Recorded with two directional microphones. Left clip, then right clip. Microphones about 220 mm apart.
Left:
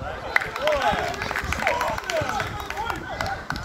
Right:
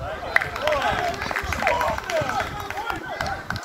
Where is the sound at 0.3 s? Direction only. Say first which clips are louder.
Right 1 dB; 30° left (ahead or behind).